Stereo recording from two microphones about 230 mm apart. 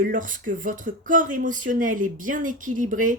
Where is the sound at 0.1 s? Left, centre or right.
Right.